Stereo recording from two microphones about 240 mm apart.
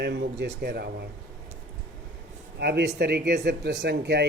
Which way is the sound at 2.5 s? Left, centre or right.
Right.